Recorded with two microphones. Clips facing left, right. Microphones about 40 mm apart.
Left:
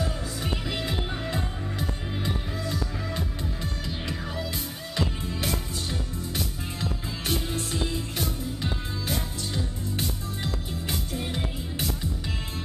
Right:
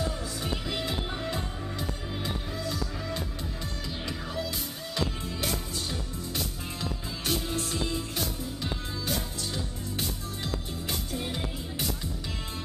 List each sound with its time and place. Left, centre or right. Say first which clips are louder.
0.0 s music: left 1 dB; centre
4.9 s music: left 2 dB; centre